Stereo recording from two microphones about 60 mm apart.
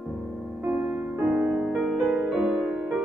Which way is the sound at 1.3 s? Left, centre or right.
Centre.